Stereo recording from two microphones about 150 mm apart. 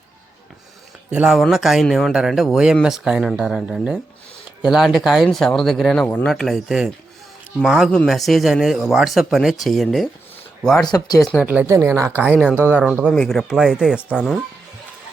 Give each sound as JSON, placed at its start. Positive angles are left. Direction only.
{"t": 1.1, "sound": "speech", "side_deg": -5}
{"t": 10.8, "sound": "speech", "side_deg": 25}
{"t": 11.4, "sound": "speech", "side_deg": -15}
{"t": 13.1, "sound": "speech", "side_deg": 5}